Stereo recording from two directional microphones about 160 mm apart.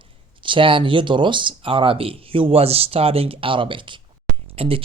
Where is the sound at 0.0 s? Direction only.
30° right (ahead or behind).